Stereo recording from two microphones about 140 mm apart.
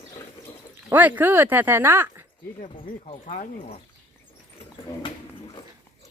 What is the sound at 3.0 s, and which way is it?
Speech, 65° left (ahead or behind).